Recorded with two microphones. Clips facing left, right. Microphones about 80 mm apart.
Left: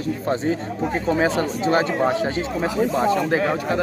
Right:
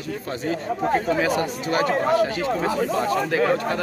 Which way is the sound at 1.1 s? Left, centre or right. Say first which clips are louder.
Left 2 dB; left.